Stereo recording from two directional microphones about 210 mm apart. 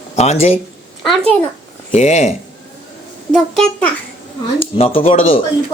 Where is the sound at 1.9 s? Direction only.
30° left (ahead or behind).